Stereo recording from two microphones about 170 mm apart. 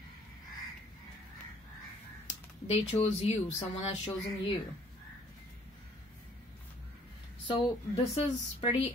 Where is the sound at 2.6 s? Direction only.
40° left (ahead or behind).